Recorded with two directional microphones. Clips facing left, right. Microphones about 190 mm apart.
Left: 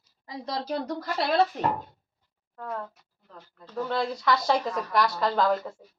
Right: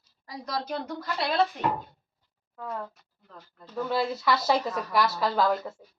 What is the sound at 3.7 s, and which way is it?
A woman's voice, 5° right (ahead or behind).